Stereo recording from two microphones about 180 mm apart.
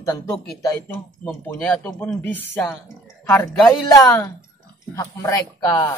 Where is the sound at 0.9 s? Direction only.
10° left (ahead or behind).